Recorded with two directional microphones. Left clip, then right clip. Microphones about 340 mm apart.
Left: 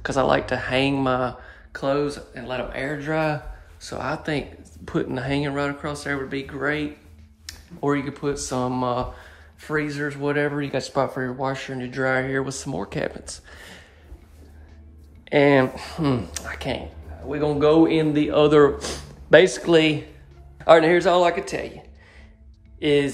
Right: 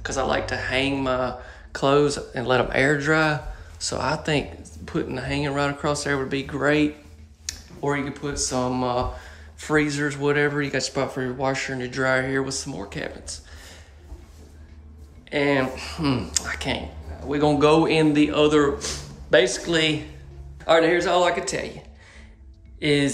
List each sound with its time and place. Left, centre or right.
0.0 s speech: centre
15.2 s a man's voice: centre
22.8 s speech: centre